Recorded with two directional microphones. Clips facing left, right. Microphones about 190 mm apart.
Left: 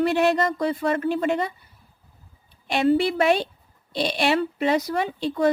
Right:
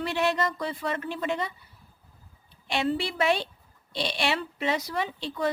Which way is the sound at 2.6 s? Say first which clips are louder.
Left 8 dB; 45° left (ahead or behind).